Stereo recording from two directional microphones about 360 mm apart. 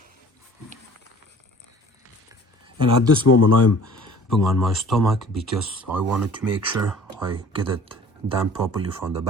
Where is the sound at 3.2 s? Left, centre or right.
Left.